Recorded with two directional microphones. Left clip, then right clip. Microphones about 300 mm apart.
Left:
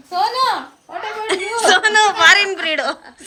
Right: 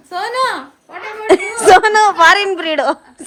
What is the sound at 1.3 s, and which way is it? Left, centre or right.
A woman's voice, centre.